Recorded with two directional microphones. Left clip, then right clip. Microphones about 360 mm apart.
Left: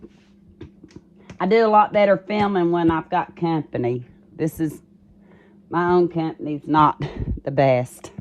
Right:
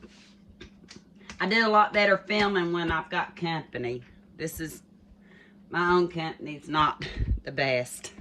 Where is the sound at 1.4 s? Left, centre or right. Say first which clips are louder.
Left 6 dB; centre.